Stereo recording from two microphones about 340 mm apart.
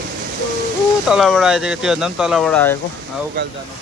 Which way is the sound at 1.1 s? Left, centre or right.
Centre.